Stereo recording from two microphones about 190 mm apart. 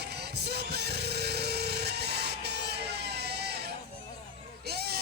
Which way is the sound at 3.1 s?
60° right (ahead or behind).